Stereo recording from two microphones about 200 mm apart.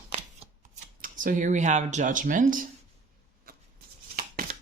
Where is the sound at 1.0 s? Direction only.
40° right (ahead or behind).